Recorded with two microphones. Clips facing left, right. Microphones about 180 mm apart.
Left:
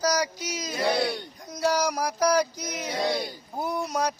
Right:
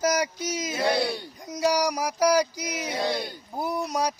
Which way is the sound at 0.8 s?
5° right (ahead or behind).